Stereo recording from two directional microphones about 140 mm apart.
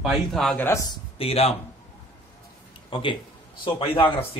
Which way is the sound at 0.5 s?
15° left (ahead or behind).